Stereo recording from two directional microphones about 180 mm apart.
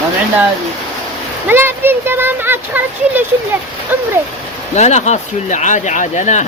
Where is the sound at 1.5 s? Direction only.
10° right (ahead or behind).